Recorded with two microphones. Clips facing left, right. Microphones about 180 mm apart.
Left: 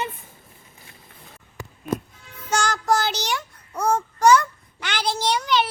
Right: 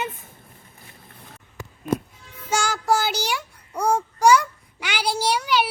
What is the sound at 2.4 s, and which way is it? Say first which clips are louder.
Child singing: even; 10° right (ahead or behind).